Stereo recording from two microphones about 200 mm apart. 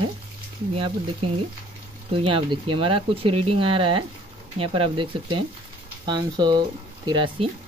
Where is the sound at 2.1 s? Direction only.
25° right (ahead or behind).